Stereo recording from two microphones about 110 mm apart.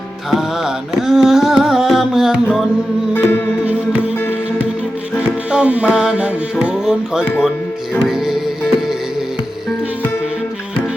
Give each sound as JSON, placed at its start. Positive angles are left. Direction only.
{"t": 0.3, "sound": "music", "side_deg": -5}
{"t": 3.2, "sound": "music", "side_deg": 20}
{"t": 5.5, "sound": "music", "side_deg": -10}